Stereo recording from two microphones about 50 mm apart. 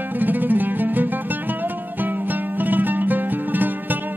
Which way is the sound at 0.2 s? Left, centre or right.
Right.